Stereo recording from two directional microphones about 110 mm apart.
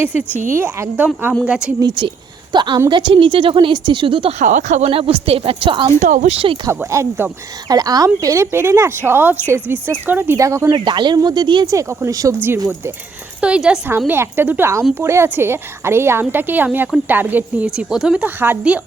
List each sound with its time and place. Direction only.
0.0 s speech: 15° right (ahead or behind)
1.8 s a woman's voice: 45° right (ahead or behind)
4.4 s speech: 70° right (ahead or behind)
6.9 s a woman's voice: 25° right (ahead or behind)
10.7 s speech: 45° right (ahead or behind)
11.6 s a woman's voice: 30° right (ahead or behind)
13.4 s a woman's voice: 10° right (ahead or behind)